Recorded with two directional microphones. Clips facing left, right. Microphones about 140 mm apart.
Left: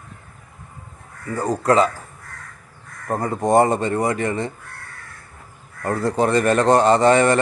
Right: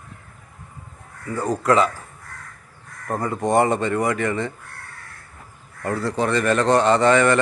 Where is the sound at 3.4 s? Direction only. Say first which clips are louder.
Left 2 dB; 40° left (ahead or behind).